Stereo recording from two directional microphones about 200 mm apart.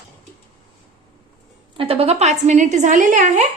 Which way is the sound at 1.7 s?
30° right (ahead or behind).